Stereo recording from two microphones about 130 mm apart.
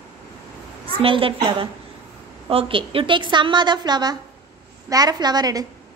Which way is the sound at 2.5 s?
45° right (ahead or behind).